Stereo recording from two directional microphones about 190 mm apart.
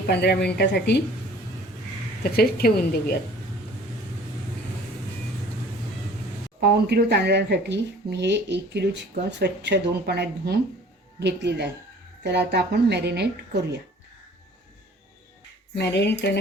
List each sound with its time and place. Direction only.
0.1 s a woman's voice: 60° left (ahead or behind)
2.3 s a woman's voice: 55° left (ahead or behind)
6.6 s speech: 60° right (ahead or behind)
15.7 s a woman's voice: 65° left (ahead or behind)